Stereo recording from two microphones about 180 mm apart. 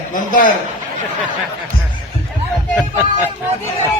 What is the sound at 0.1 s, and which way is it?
Speech, 45° left (ahead or behind).